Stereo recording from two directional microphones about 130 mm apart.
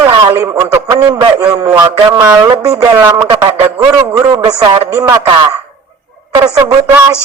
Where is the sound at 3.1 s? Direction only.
30° right (ahead or behind).